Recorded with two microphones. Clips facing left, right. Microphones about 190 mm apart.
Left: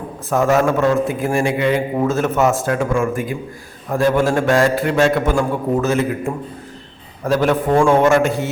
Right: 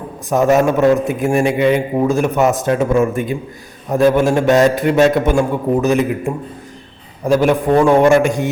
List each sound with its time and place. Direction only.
0.3 s a man's voice: 20° right (ahead or behind)